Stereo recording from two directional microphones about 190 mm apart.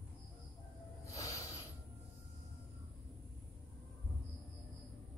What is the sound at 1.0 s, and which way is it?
Music, 15° left (ahead or behind).